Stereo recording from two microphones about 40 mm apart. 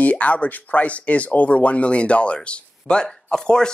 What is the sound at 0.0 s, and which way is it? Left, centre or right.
Speech, left.